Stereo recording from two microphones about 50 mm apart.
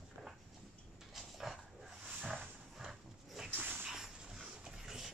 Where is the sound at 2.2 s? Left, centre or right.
Right.